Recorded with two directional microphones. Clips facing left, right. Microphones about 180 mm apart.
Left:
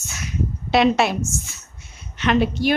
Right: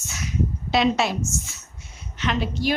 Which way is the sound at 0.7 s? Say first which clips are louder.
Left 4 dB; 60° left (ahead or behind).